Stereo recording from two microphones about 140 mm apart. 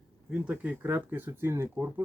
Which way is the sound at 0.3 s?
10° right (ahead or behind).